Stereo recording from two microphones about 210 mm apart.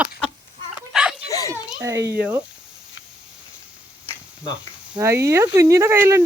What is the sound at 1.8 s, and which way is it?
Speech, 15° right (ahead or behind).